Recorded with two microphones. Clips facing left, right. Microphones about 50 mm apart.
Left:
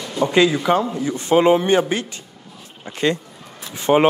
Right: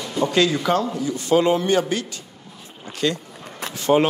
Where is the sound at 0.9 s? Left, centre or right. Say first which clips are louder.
Left 2 dB; left.